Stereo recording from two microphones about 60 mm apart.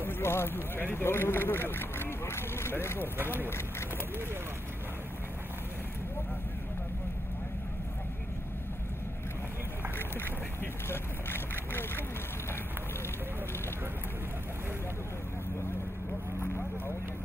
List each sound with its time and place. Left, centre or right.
0.0 s speech: left
9.9 s speech: left